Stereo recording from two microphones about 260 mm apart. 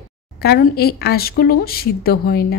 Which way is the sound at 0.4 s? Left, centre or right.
Left.